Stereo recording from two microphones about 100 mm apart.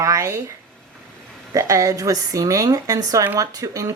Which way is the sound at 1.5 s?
35° right (ahead or behind).